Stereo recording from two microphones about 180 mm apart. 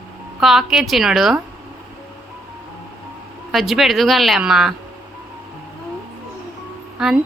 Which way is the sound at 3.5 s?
Centre (ahead or behind).